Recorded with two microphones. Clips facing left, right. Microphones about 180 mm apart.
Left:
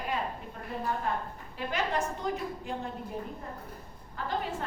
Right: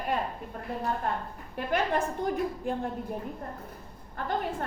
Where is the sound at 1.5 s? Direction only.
55° right (ahead or behind).